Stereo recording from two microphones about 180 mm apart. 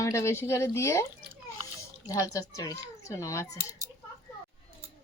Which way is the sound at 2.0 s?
20° left (ahead or behind).